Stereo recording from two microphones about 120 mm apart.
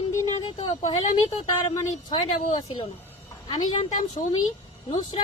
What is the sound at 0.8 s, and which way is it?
Speech, 65° left (ahead or behind).